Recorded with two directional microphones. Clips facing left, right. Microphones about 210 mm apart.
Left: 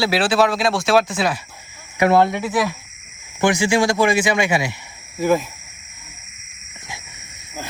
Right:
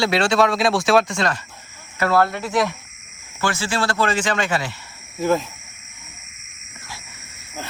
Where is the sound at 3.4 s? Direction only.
15° left (ahead or behind).